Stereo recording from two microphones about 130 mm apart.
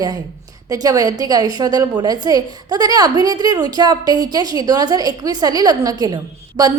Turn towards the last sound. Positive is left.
turn(degrees=-30)  # may be behind; listen again after turning